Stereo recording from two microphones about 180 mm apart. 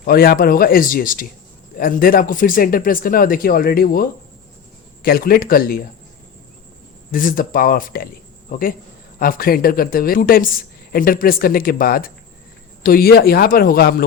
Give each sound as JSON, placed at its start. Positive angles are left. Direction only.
{"t": 0.0, "sound": "speech", "side_deg": 55}
{"t": 7.1, "sound": "a man's voice", "side_deg": 50}